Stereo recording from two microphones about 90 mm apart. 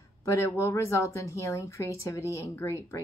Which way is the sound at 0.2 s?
35° left (ahead or behind).